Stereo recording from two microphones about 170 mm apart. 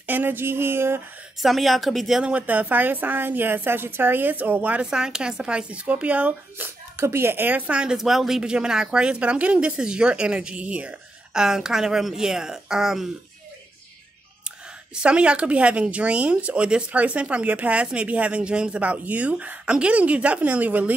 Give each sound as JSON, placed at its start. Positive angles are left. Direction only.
{"t": 0.0, "sound": "speech", "side_deg": -10}
{"t": 1.4, "sound": "a woman's voice", "side_deg": 0}
{"t": 15.0, "sound": "speech", "side_deg": -5}